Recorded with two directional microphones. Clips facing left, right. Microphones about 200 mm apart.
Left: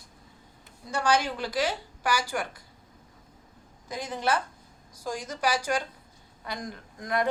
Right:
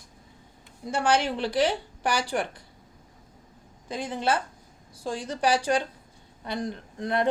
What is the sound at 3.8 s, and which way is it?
Speech, 30° right (ahead or behind).